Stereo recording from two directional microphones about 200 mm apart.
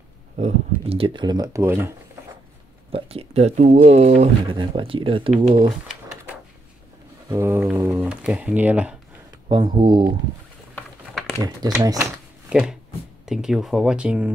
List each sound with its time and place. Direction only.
0.4 s speech: 30° right (ahead or behind); by 2.0 s 10° right (ahead or behind)
2.9 s speech: 30° right (ahead or behind)
7.2 s speech: 15° right (ahead or behind)
9.5 s speech: 20° right (ahead or behind)
10.7 s a sound: 5° left (ahead or behind)
11.4 s speech: 20° right (ahead or behind)
12.4 s speech: 5° right (ahead or behind)